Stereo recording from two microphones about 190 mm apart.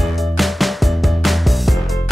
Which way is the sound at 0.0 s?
Centre (ahead or behind).